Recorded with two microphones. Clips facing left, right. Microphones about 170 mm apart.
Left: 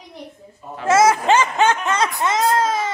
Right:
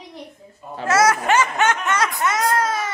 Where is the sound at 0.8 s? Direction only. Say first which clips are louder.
Left 3 dB; 25° left (ahead or behind).